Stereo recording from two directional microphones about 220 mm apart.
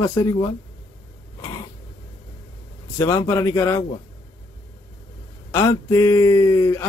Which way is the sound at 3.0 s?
15° left (ahead or behind).